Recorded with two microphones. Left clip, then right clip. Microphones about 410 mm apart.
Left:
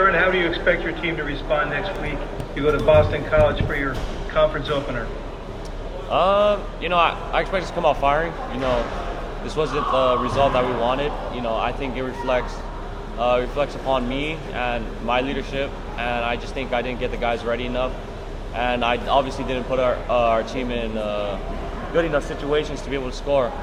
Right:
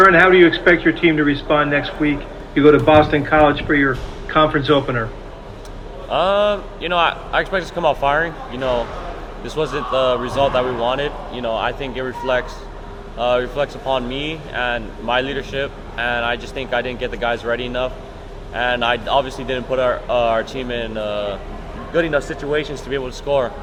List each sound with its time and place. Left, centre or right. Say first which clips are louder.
0.0 s a man's voice: right 8 dB; right
6.1 s speech: right 1 dB; right
9.6 s speech: right 1 dB; right
22.5 s speech: right 2 dB; right